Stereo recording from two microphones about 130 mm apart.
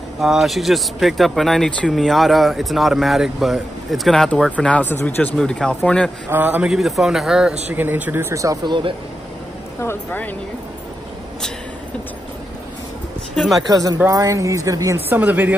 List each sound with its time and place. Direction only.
0.2 s speech: centre (ahead or behind)
6.2 s speech: 15° right (ahead or behind)
6.7 s speech: centre (ahead or behind)
7.6 s speech: 15° right (ahead or behind)
9.8 s speech: 15° left (ahead or behind)
13.6 s speech: 30° right (ahead or behind)
15.0 s speech: 15° right (ahead or behind)